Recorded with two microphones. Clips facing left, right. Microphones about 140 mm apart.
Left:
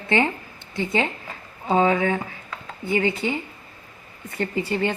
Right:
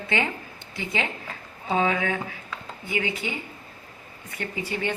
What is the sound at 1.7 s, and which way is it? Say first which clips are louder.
Speech: left 5 dB; 40° left (ahead or behind).